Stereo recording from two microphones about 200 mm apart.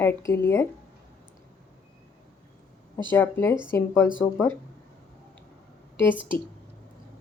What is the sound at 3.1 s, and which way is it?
Speech, 10° left (ahead or behind).